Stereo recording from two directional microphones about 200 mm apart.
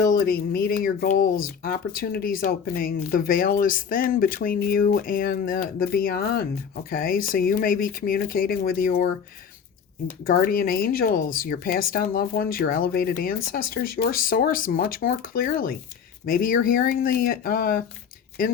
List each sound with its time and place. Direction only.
0.0 s a woman's voice: 45° left (ahead or behind)
10.2 s a woman's voice: 45° left (ahead or behind)